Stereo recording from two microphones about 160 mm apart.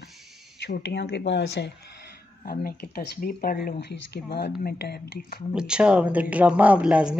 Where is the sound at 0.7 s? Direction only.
90° left.